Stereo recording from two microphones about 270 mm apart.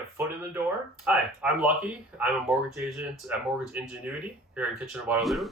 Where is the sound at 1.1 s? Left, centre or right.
Centre.